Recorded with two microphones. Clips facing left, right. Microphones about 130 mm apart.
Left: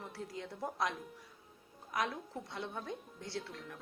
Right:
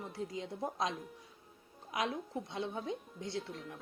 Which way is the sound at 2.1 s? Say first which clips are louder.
Right 4 dB; 20° right (ahead or behind).